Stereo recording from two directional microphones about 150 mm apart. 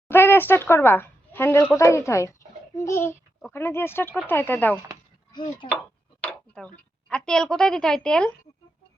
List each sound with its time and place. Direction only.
0.1 s a woman's voice: 15° left (ahead or behind)
5.3 s speech: 30° left (ahead or behind)
6.2 s tick-tock: 5° left (ahead or behind)
7.3 s a woman's voice: 5° left (ahead or behind)